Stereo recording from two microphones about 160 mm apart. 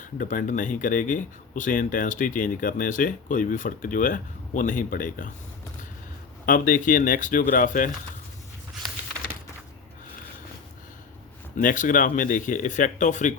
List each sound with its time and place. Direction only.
0.0 s speech: 55° left (ahead or behind)
6.4 s speech: 60° left (ahead or behind)
11.5 s speech: 55° left (ahead or behind)